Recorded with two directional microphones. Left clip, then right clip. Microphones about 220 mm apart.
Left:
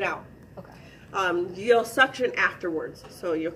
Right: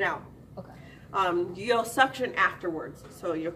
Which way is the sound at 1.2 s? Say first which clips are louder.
Left 8 dB; 15° right (ahead or behind).